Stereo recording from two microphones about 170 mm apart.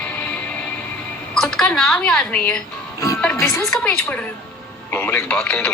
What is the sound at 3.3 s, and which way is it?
Speech, 20° left (ahead or behind).